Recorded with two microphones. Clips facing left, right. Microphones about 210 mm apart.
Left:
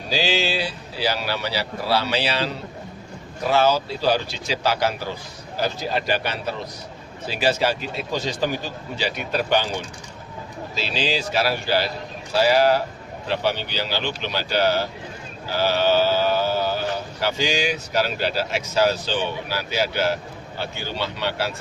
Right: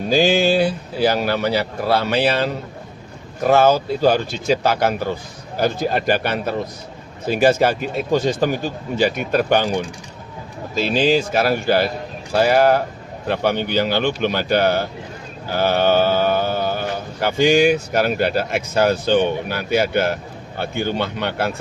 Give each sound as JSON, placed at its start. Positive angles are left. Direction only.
{"t": 0.1, "sound": "speech", "side_deg": -50}
{"t": 10.8, "sound": "speech", "side_deg": -50}